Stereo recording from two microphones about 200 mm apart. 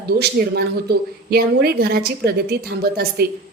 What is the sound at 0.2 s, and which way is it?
A woman's voice, 55° right (ahead or behind).